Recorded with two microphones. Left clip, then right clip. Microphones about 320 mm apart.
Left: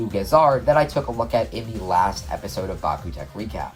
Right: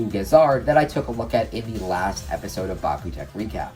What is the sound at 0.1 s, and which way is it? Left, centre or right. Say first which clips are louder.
Speech: even; centre.